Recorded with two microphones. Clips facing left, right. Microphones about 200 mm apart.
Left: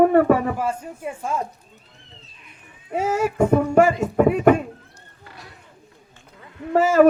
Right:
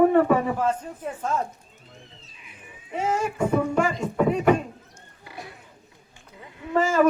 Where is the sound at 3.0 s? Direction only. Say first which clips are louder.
Left 4 dB; 5° left (ahead or behind).